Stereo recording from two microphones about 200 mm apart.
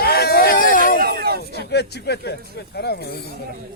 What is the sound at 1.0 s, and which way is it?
Speech, 50° right (ahead or behind).